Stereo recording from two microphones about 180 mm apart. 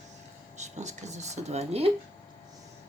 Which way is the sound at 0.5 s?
40° right (ahead or behind).